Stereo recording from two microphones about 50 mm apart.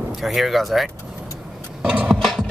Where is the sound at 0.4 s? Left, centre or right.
Centre.